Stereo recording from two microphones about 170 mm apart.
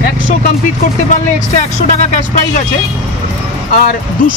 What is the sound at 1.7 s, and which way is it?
Speech, 40° left (ahead or behind).